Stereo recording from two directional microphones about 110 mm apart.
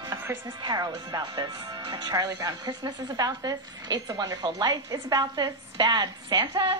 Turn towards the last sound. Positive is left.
turn(degrees=-40)  # may be behind; listen again after turning